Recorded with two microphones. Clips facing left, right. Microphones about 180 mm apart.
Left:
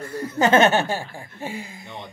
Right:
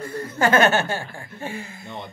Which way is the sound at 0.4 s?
20° left (ahead or behind).